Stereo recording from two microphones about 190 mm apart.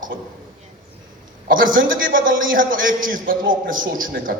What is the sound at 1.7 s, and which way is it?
Speech, 45° right (ahead or behind).